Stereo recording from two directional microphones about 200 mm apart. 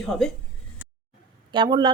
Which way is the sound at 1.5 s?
25° right (ahead or behind).